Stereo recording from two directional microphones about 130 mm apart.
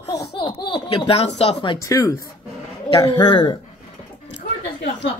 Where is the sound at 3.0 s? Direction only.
35° left (ahead or behind).